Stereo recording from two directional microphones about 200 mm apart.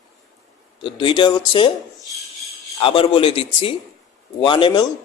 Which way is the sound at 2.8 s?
25° left (ahead or behind).